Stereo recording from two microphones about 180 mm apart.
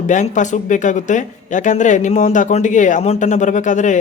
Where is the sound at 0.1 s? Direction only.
45° left (ahead or behind).